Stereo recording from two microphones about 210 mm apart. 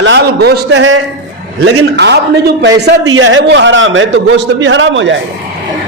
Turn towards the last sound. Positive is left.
turn(degrees=-60)  # may be behind; listen again after turning